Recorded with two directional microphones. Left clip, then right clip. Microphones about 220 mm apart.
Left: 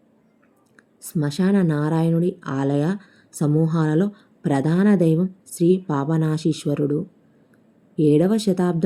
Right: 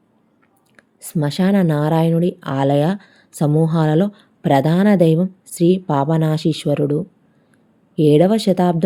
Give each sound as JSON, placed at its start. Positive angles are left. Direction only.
{"t": 0.8, "sound": "speech", "side_deg": -25}